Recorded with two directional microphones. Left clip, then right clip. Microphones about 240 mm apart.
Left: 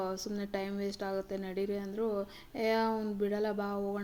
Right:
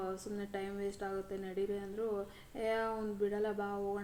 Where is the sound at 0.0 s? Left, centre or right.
Left.